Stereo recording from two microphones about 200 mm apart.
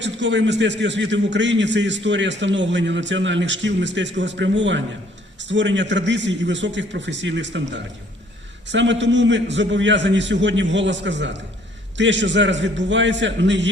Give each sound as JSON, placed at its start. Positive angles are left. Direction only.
{"t": 0.0, "sound": "a man's voice", "side_deg": -65}